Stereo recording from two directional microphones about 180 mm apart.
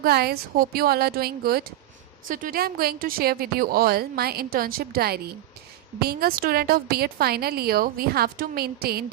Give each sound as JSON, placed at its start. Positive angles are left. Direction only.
{"t": 0.0, "sound": "a woman's voice", "side_deg": -60}